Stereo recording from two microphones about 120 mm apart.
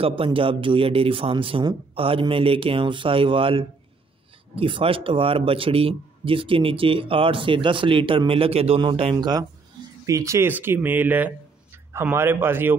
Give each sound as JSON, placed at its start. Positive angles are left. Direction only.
{"t": 0.0, "sound": "a man's voice", "side_deg": -50}
{"t": 9.2, "sound": "speech", "side_deg": -35}